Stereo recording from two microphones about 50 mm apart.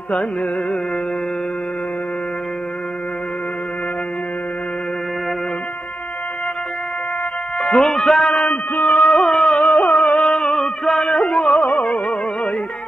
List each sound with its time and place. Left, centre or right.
0.1 s carnatic music: left
7.6 s speech: centre
8.5 s a man's voice: left
9.0 s a sound: centre
9.7 s music: left
10.2 s a sound: centre
11.1 s music: left